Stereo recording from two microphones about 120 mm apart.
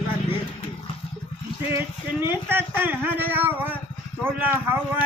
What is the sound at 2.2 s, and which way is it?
Speech, 20° right (ahead or behind).